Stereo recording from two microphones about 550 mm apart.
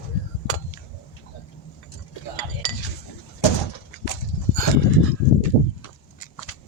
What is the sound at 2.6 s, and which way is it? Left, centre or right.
Cutlery, left.